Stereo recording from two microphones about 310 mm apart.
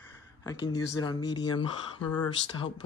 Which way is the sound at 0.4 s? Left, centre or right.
Centre.